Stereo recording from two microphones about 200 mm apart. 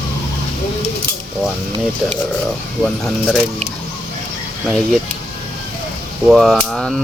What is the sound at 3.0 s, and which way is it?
Speech, centre (ahead or behind).